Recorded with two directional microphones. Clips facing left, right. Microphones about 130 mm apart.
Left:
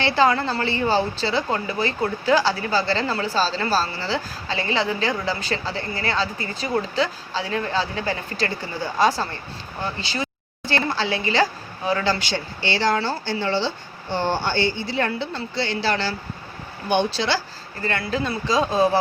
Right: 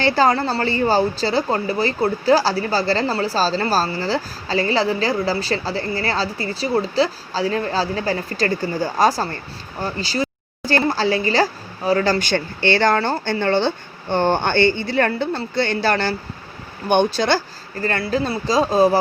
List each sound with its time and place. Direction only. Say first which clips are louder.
0.0 s speech: right 2 dB; 40° right (ahead or behind)